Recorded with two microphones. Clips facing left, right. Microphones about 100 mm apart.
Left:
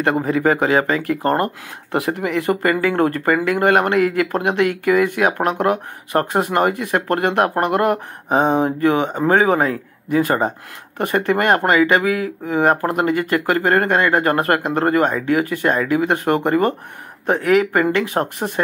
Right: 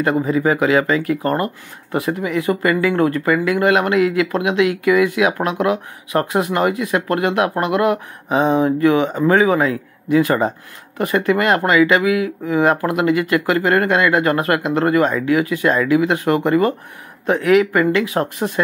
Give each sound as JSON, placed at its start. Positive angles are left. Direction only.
{"t": 0.0, "sound": "speech", "side_deg": 55}
{"t": 1.9, "sound": "speech", "side_deg": 70}
{"t": 2.5, "sound": "speech", "side_deg": 50}